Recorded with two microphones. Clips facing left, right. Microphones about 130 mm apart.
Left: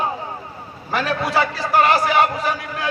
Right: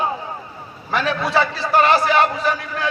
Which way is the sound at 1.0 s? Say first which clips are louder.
Right 1 dB; 10° left (ahead or behind).